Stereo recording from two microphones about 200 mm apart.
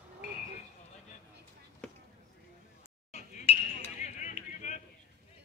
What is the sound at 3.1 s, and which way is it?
Chink, 35° left (ahead or behind).